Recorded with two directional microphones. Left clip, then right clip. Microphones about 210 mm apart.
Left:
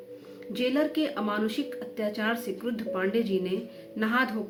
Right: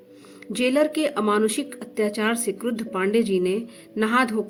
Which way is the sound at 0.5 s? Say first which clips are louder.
Right 6 dB; 60° right (ahead or behind).